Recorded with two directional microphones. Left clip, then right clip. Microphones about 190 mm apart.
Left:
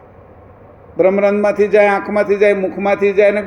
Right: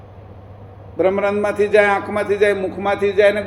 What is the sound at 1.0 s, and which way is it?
A man's voice, 40° left (ahead or behind).